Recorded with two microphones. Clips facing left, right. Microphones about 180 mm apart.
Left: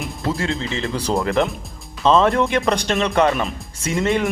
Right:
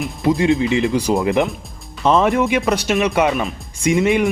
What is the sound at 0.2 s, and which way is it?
Speech, 15° right (ahead or behind).